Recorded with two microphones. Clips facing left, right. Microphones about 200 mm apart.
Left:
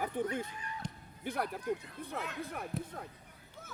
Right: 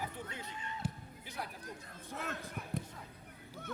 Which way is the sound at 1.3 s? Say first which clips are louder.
Left 11 dB; 60° left (ahead or behind).